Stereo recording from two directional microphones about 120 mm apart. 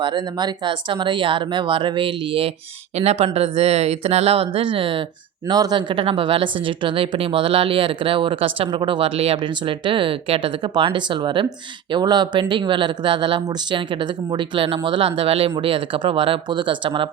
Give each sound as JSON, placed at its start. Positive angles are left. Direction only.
{"t": 0.0, "sound": "speech", "side_deg": -40}
{"t": 2.9, "sound": "speech", "side_deg": -60}
{"t": 5.5, "sound": "speech", "side_deg": -35}